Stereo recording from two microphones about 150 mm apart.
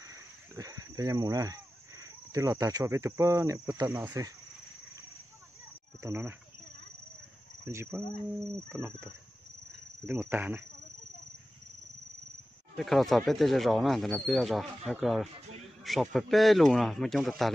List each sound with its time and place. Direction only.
0.0 s a sound: 20° right (ahead or behind)
3.2 s cricket: 20° right (ahead or behind)
6.0 s speech: 15° right (ahead or behind)
7.6 s cricket: 15° right (ahead or behind)
10.0 s speech: 15° right (ahead or behind)
12.7 s speech: centre (ahead or behind)